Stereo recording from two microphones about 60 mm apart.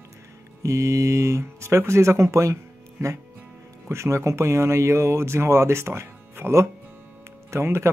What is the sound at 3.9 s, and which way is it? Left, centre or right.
Speech, right.